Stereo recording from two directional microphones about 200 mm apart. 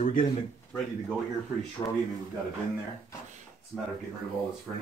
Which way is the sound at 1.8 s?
20° left (ahead or behind).